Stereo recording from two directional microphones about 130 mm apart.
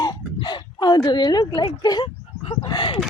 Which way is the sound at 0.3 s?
35° left (ahead or behind).